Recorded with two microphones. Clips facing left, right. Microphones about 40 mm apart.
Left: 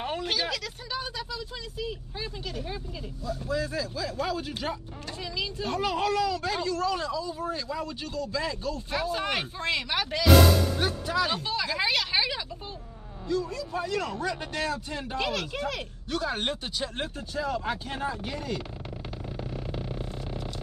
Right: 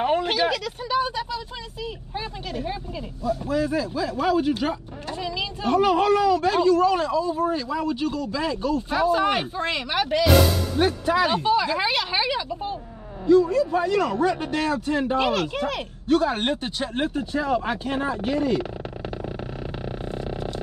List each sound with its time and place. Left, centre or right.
0.0 s a man's voice: right
9.1 s a man's voice: centre
9.8 s speech: right
13.5 s speech: right
14.4 s speech: right